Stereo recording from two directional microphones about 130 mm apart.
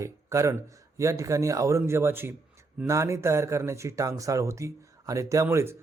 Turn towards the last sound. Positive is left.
turn(degrees=-20)  # may be behind; listen again after turning